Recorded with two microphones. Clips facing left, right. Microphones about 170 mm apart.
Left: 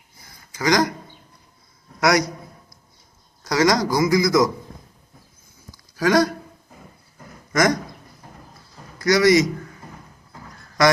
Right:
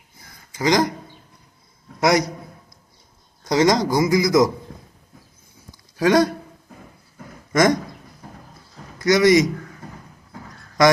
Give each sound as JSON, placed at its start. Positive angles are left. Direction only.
{"t": 0.5, "sound": "speech", "side_deg": -20}
{"t": 2.0, "sound": "a man's voice", "side_deg": -25}
{"t": 3.5, "sound": "speech", "side_deg": -20}
{"t": 6.0, "sound": "speech", "side_deg": -25}
{"t": 7.5, "sound": "speech", "side_deg": -25}
{"t": 9.0, "sound": "a man's voice", "side_deg": -20}